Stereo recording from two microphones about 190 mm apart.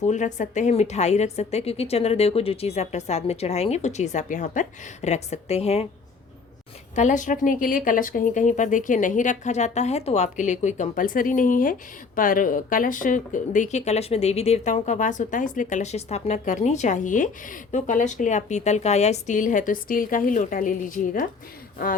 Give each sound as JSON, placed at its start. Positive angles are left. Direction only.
{"t": 0.0, "sound": "a woman's voice", "side_deg": 40}
{"t": 6.9, "sound": "a woman's voice", "side_deg": 40}